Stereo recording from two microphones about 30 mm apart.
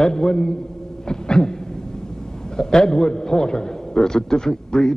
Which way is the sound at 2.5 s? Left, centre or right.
Left.